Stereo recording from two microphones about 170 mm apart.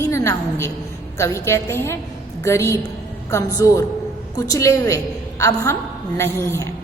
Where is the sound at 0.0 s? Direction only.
15° left (ahead or behind).